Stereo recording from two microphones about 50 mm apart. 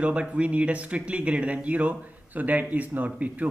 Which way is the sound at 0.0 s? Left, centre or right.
Right.